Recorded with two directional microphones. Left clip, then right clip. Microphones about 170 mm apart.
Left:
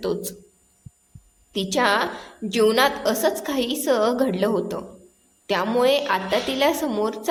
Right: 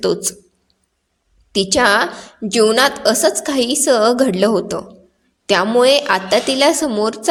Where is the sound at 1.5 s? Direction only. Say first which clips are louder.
Right 7 dB; 40° right (ahead or behind).